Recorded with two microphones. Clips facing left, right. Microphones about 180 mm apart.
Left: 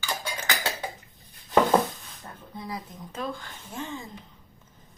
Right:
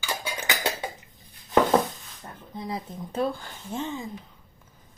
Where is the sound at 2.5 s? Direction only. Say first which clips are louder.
Right 4 dB; 25° right (ahead or behind).